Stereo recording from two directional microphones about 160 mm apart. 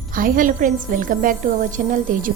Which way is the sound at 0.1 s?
60° right (ahead or behind).